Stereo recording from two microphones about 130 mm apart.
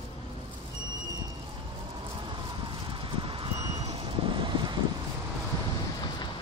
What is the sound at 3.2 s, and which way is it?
Vehicle, 40° right (ahead or behind).